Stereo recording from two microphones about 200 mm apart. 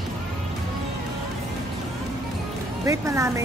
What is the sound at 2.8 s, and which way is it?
Speech, 15° right (ahead or behind).